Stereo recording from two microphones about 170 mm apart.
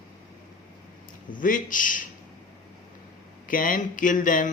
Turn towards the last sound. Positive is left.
turn(degrees=50)  # may be behind; listen again after turning